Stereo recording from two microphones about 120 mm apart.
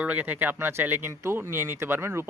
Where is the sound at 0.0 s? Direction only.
15° right (ahead or behind).